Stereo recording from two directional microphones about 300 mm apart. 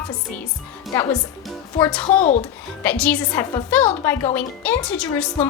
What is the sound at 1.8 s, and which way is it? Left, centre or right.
Speech, centre.